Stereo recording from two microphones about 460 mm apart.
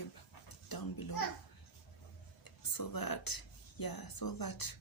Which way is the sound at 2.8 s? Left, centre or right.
Left.